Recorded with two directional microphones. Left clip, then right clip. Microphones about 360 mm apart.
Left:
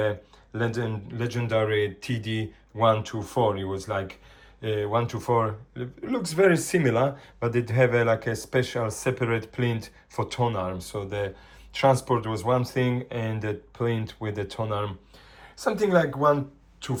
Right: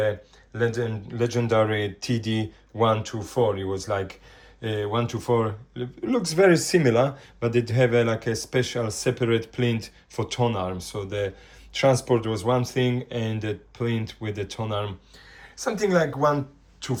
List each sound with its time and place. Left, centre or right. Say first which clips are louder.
0.0 s speech: right 2 dB; centre